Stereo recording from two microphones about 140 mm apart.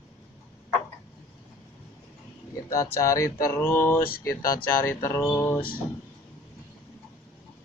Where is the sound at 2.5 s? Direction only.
20° left (ahead or behind).